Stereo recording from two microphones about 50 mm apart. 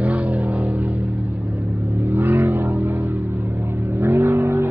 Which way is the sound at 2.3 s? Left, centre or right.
Right.